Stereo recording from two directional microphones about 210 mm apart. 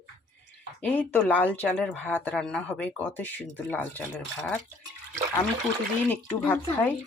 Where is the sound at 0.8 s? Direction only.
5° left (ahead or behind).